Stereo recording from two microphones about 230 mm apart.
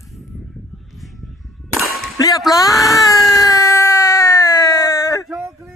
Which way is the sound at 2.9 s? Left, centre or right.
Centre.